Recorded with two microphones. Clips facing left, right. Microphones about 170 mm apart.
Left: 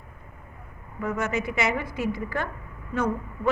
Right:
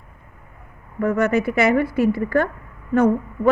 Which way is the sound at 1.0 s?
60° right (ahead or behind).